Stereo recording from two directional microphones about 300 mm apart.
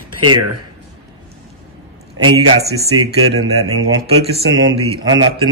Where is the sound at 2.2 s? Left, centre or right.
Right.